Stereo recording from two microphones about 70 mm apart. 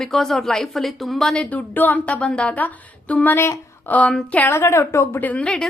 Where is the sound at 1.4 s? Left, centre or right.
Left.